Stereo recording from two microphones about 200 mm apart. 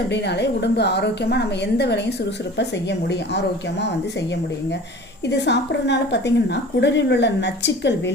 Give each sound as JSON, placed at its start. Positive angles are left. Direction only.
{"t": 0.1, "sound": "a woman's voice", "side_deg": 55}
{"t": 5.2, "sound": "a woman's voice", "side_deg": 60}